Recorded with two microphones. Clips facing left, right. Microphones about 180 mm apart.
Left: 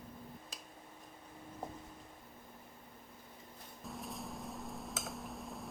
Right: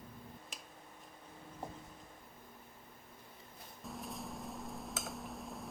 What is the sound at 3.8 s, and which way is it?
Dishes, centre (ahead or behind).